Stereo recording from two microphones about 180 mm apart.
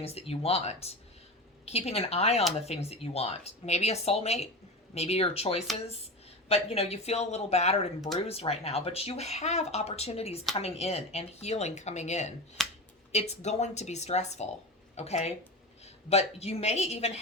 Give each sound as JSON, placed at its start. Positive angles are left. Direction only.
{"t": 0.0, "sound": "speech", "side_deg": 35}
{"t": 12.6, "sound": "finger snapping", "side_deg": 0}
{"t": 13.1, "sound": "speech", "side_deg": 35}